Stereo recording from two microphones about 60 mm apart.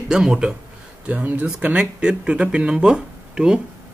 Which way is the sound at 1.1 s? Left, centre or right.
Right.